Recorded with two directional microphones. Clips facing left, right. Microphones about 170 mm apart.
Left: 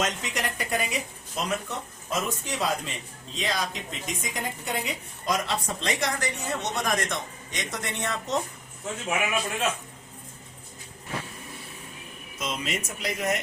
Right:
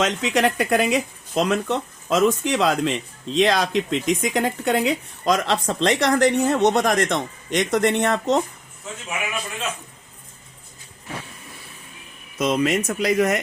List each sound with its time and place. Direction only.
0.0 s speech: 90° right; by 8.4 s 70° right (ahead or behind)
12.4 s speech: 70° right (ahead or behind); by 13.4 s 85° right